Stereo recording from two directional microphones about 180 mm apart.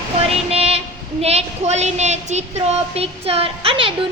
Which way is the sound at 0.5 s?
35° right (ahead or behind).